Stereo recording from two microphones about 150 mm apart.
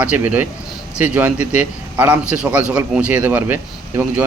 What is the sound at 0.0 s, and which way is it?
A man's voice, 10° right (ahead or behind).